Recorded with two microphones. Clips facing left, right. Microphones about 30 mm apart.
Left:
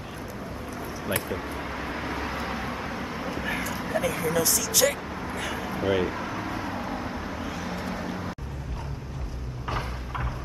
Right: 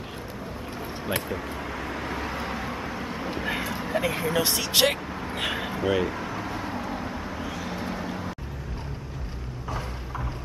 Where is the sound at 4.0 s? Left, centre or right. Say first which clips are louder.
Even; right.